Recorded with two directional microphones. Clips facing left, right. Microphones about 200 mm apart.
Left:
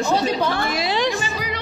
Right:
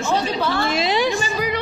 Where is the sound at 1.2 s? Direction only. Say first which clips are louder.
Right 4 dB; 50° right (ahead or behind).